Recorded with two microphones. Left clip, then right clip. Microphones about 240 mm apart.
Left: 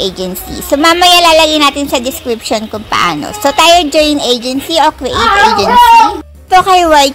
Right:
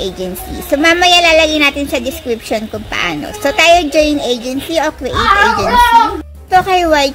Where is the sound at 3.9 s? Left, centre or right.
Left.